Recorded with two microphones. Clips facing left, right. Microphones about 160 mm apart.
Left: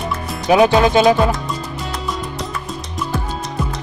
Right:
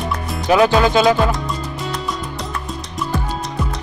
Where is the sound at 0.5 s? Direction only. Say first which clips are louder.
Left 2 dB; 20° left (ahead or behind).